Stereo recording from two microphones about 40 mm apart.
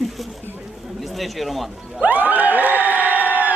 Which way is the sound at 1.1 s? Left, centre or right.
Centre.